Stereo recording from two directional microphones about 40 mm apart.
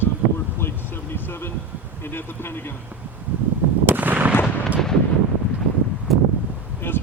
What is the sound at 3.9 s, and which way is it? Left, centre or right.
Artillery fire, right.